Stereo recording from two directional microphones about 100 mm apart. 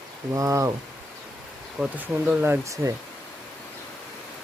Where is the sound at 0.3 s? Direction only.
35° right (ahead or behind).